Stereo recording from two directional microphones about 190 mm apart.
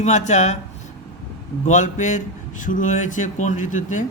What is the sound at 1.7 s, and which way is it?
Speech, 40° left (ahead or behind).